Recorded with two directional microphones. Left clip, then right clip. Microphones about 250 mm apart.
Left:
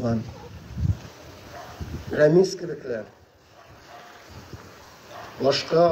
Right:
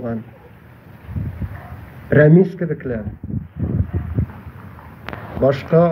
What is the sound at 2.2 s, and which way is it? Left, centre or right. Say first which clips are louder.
Speech: right 2 dB; left.